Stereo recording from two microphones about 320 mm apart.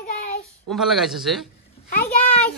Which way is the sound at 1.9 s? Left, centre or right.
Left.